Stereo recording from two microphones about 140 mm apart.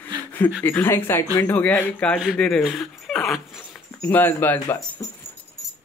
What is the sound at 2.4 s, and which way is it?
Dog, 5° left (ahead or behind).